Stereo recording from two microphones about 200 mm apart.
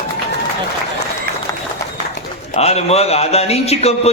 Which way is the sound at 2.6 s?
30° left (ahead or behind).